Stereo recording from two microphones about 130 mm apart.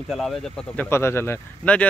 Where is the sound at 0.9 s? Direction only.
20° left (ahead or behind).